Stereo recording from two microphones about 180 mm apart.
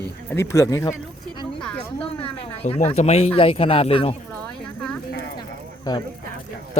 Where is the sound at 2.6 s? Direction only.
40° left (ahead or behind).